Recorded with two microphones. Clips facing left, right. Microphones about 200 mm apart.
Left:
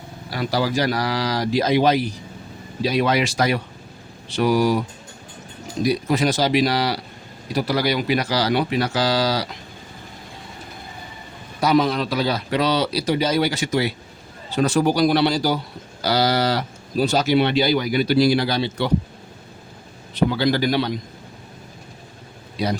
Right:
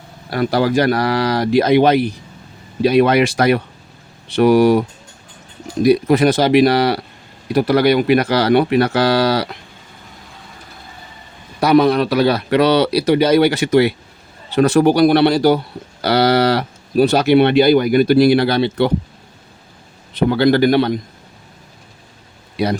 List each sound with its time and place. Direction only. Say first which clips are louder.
0.3 s speech: right 6 dB; 55° right (ahead or behind)
5.8 s speech: right 8 dB; 60° right (ahead or behind)
11.6 s speech: right 6 dB; 60° right (ahead or behind)
20.1 s speech: right 6 dB; 60° right (ahead or behind)
22.5 s speech: right 5 dB; 60° right (ahead or behind)